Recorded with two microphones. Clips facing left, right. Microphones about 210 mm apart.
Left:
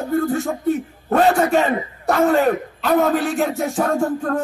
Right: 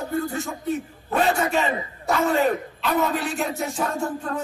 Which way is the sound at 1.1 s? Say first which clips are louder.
Left 6 dB; 55° left (ahead or behind).